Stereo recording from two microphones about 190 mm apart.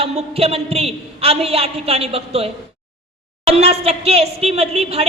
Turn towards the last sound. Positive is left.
turn(degrees=-30)  # may be behind; listen again after turning